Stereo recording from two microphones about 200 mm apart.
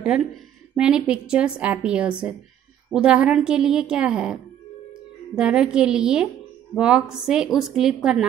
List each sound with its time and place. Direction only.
0.7 s a woman's voice: 5° right (ahead or behind)